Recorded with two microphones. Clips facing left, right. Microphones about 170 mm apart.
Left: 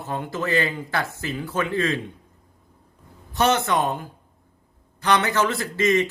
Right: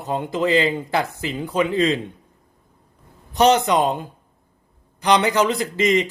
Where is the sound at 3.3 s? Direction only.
15° right (ahead or behind).